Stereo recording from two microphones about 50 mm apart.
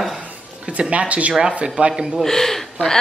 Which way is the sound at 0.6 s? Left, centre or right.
Right.